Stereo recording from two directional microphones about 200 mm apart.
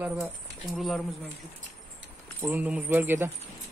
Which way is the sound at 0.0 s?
Centre (ahead or behind).